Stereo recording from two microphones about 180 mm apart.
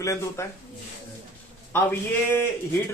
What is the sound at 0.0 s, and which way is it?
Speech, 15° left (ahead or behind).